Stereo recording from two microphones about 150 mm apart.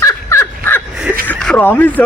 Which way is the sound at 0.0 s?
20° left (ahead or behind).